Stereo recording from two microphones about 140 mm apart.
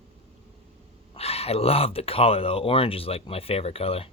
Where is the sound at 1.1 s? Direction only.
45° left (ahead or behind).